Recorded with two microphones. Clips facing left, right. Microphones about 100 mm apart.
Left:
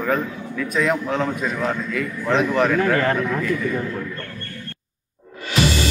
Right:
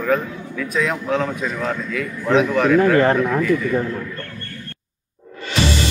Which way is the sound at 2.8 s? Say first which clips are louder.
Right 4 dB; 25° right (ahead or behind).